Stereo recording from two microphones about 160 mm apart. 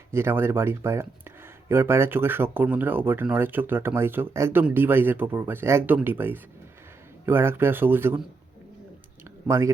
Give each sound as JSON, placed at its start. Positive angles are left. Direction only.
{"t": 0.1, "sound": "speech", "side_deg": -15}
{"t": 9.5, "sound": "speech", "side_deg": -20}